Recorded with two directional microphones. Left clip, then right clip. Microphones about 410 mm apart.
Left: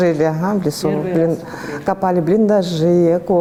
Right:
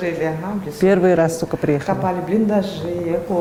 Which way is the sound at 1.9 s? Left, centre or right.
Left.